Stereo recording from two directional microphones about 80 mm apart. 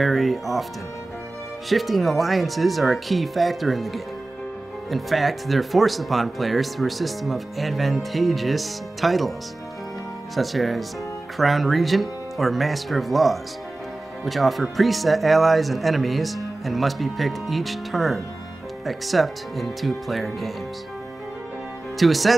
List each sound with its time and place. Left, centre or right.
0.0 s speech: centre
1.7 s speech: centre
10.3 s speech: centre
21.9 s speech: centre